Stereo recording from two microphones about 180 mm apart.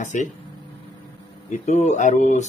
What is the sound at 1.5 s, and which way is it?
Speech, 40° left (ahead or behind).